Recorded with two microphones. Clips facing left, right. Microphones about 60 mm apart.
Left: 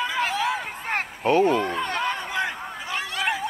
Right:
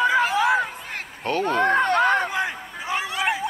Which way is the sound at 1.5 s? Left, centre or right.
Right.